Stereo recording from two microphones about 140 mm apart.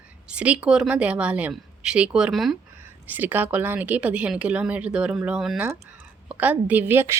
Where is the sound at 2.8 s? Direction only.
15° right (ahead or behind).